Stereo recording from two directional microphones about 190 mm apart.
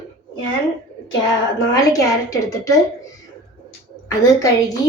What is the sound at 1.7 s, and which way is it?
A woman's voice, 15° left (ahead or behind).